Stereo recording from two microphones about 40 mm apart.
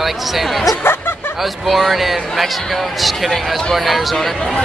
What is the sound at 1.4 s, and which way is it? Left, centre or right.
Speech, centre.